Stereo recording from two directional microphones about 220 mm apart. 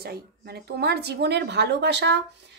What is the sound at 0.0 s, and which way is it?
Speech, 45° right (ahead or behind).